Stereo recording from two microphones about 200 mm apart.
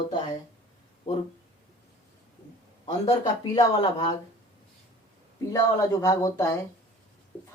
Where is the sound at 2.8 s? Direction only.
20° left (ahead or behind).